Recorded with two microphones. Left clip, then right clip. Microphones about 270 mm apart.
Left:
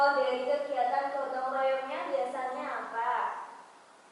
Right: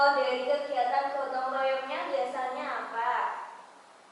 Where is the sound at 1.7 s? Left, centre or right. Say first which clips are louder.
Right 1 dB; centre.